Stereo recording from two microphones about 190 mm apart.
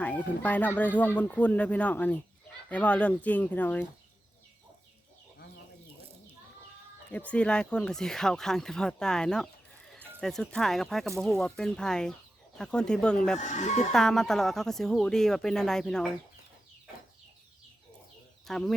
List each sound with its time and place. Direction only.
0.0 s speech: 10° left (ahead or behind)
7.1 s speech: 5° left (ahead or behind)
13.4 s speech: 40° left (ahead or behind)
13.9 s speech: centre (ahead or behind)
18.4 s speech: centre (ahead or behind)